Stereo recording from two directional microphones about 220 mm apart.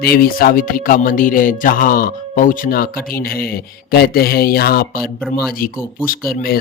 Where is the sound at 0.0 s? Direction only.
40° left (ahead or behind).